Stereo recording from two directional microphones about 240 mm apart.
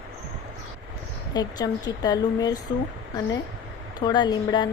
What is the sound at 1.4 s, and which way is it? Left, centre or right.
Speech, centre.